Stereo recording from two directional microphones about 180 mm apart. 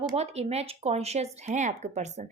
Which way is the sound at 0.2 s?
35° right (ahead or behind).